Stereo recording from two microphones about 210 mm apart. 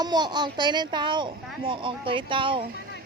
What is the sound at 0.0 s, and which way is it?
A child's voice, 20° right (ahead or behind).